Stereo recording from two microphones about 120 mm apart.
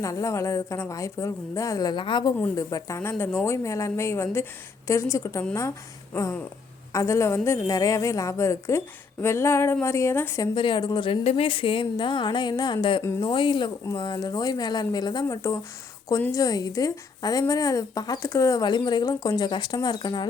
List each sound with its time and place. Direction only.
0.0 s a woman's voice: 25° left (ahead or behind)
6.9 s a woman's voice: 25° left (ahead or behind)
10.5 s speech: 45° left (ahead or behind)
11.2 s speech: 55° left (ahead or behind); by 13.0 s 40° left (ahead or behind)
13.0 s a woman's voice: 25° left (ahead or behind)
13.2 s a woman's voice: 40° left (ahead or behind)